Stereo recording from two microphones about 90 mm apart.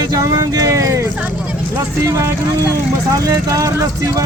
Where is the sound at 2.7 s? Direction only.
40° right (ahead or behind).